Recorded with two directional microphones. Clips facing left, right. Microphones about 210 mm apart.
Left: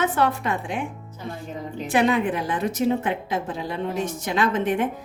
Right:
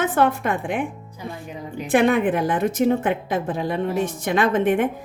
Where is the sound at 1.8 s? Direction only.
55° right (ahead or behind).